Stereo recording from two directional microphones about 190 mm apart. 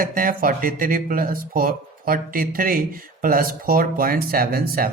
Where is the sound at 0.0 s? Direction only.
50° right (ahead or behind).